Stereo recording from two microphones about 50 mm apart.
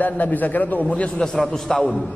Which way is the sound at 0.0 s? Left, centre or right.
Left.